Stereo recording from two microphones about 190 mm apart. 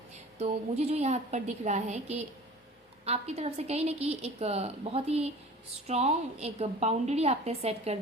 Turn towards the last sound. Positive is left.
turn(degrees=-35)  # may be behind; listen again after turning